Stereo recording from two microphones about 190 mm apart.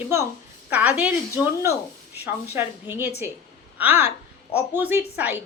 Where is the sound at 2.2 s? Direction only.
10° right (ahead or behind).